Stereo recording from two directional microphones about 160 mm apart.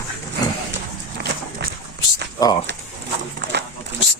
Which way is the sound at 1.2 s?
90° right.